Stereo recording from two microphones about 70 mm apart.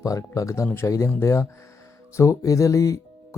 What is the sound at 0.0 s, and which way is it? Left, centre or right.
Speech, left.